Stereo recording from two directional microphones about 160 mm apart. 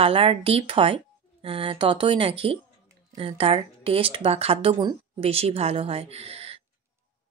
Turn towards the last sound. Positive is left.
turn(degrees=-40)  # may be behind; listen again after turning